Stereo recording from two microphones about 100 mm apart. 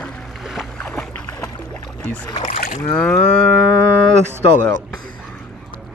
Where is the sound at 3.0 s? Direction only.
10° left (ahead or behind).